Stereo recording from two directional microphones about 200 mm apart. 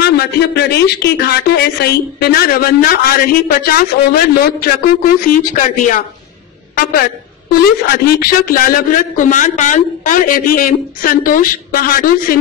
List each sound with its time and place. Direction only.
0.0 s a woman's voice: 55° left (ahead or behind)